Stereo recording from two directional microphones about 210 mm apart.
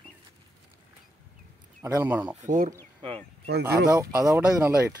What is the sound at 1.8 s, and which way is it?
Speech, 10° right (ahead or behind).